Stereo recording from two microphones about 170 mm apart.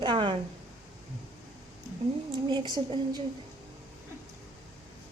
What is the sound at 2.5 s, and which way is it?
Speech, 25° right (ahead or behind).